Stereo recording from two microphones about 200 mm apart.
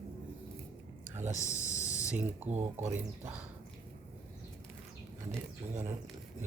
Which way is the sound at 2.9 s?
10° right (ahead or behind).